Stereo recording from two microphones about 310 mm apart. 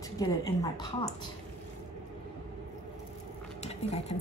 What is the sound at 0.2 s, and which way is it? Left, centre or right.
Speech, centre.